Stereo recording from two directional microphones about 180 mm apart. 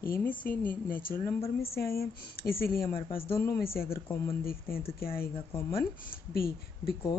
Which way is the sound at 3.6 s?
55° left (ahead or behind).